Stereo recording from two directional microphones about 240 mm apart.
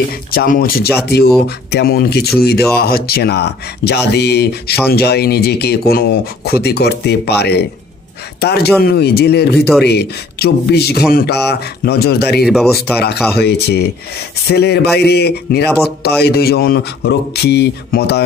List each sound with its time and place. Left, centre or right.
0.3 s speech: left